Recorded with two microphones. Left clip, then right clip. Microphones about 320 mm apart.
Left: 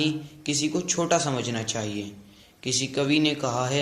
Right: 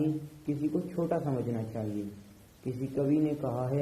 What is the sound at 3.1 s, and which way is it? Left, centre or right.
Speech, left.